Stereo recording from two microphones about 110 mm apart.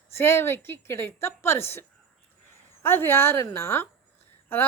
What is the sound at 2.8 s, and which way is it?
Speech, 20° left (ahead or behind).